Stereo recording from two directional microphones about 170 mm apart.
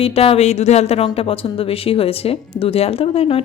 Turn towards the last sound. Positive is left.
turn(degrees=35)  # may be behind; listen again after turning